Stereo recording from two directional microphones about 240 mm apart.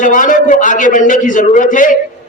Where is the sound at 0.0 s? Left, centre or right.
Left.